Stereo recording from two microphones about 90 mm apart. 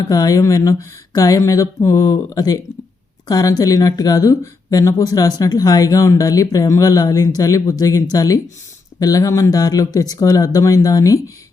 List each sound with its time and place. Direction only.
0.1 s speech: 40° left (ahead or behind)